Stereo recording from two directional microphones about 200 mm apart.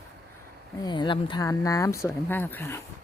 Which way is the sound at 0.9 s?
25° left (ahead or behind).